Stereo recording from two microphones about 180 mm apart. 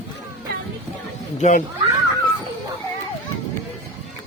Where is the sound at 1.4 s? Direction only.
45° left (ahead or behind).